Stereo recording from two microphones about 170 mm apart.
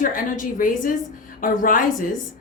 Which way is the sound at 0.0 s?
50° left (ahead or behind).